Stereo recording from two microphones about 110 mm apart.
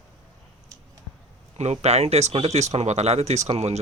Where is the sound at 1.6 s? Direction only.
85° right.